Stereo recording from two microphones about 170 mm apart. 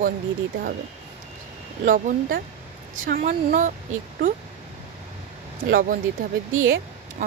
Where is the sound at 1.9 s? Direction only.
50° right (ahead or behind).